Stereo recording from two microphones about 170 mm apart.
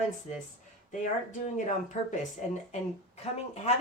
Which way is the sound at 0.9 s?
50° left (ahead or behind).